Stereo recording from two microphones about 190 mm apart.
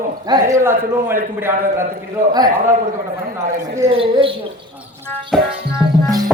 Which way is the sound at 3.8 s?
30° right (ahead or behind).